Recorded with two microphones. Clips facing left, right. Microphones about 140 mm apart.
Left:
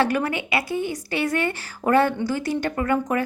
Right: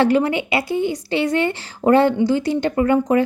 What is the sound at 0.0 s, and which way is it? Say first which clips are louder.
A woman's voice: right 6 dB; 25° right (ahead or behind).